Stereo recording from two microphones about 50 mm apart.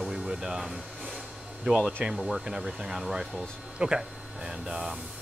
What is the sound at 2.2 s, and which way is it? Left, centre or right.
Speech, centre.